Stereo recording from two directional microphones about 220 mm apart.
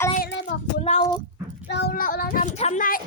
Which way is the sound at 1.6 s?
50° left (ahead or behind).